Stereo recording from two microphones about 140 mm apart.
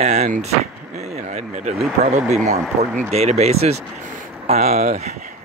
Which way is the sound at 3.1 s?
50° right (ahead or behind).